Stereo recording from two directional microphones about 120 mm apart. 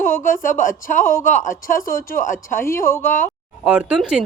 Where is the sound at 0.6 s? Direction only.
90° left.